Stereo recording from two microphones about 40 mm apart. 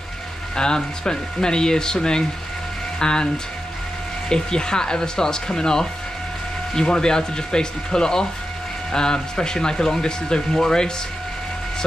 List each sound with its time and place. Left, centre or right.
0.6 s speech: centre
4.3 s speech: centre